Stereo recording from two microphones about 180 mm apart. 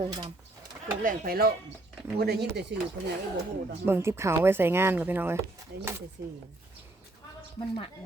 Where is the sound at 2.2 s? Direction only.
65° right (ahead or behind).